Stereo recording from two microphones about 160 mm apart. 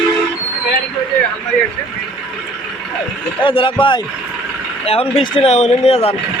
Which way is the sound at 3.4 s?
35° left (ahead or behind).